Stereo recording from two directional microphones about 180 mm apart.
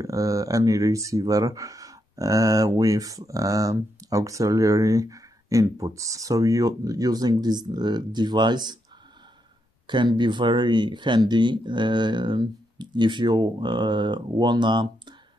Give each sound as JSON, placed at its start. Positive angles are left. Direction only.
{"t": 0.0, "sound": "speech", "side_deg": -20}
{"t": 9.8, "sound": "speech", "side_deg": -25}